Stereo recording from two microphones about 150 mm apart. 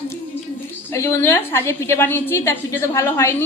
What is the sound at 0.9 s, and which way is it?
A woman's voice, 15° left (ahead or behind).